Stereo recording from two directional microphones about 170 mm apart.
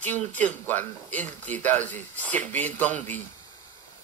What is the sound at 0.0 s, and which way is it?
A man's voice, 10° left (ahead or behind).